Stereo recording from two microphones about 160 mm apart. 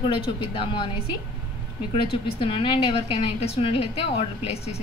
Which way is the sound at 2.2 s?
35° left (ahead or behind).